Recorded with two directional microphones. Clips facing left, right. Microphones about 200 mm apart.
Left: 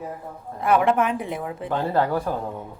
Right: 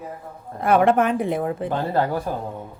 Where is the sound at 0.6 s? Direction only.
45° right (ahead or behind).